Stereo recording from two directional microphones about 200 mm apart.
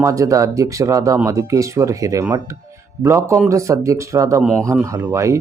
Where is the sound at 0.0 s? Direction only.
15° right (ahead or behind).